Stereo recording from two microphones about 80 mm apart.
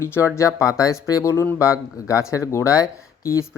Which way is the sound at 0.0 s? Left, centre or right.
Left.